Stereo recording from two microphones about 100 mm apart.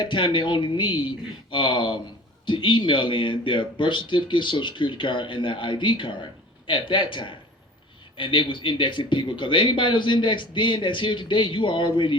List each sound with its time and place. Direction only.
0.0 s speech: 50° left (ahead or behind)